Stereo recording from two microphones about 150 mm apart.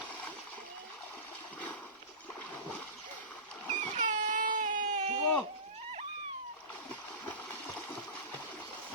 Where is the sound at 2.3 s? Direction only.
10° left (ahead or behind).